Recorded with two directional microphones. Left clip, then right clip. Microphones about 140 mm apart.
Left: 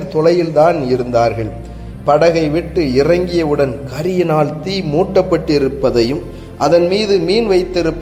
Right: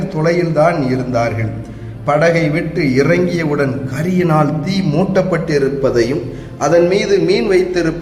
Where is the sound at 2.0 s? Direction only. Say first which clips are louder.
Left 2 dB; 30° left (ahead or behind).